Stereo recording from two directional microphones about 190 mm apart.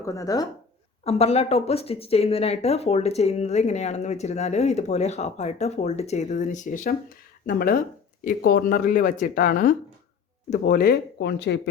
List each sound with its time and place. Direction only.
0.0 s speech: 15° left (ahead or behind)
1.0 s speech: 35° left (ahead or behind); by 11.7 s 65° left (ahead or behind)